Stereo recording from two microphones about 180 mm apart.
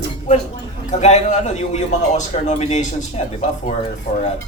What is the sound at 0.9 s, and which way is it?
A man's voice, 40° left (ahead or behind).